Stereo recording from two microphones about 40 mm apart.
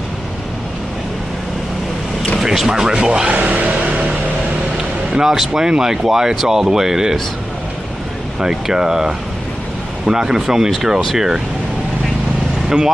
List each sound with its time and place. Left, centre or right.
2.4 s speech: centre; by 3.3 s right
3.3 s music: right
5.1 s speech: centre
8.4 s speech: centre
12.6 s speech: centre